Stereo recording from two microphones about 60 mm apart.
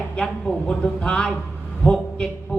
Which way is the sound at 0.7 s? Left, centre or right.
Centre.